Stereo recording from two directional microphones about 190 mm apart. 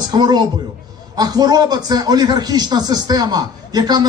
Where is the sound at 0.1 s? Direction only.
20° right (ahead or behind).